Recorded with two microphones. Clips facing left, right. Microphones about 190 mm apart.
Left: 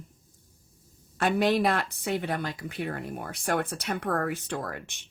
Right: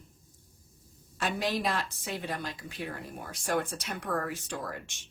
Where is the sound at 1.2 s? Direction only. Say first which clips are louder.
Left 7 dB; 60° left (ahead or behind).